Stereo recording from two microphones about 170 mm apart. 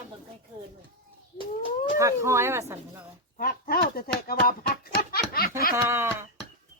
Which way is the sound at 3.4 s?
65° left (ahead or behind).